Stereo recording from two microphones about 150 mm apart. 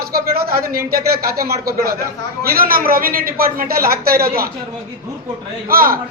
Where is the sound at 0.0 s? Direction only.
90° right.